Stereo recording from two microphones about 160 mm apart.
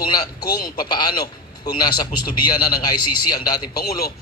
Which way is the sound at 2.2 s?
25° left (ahead or behind).